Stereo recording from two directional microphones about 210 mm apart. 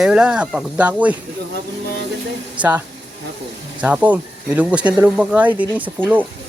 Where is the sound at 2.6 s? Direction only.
10° right (ahead or behind).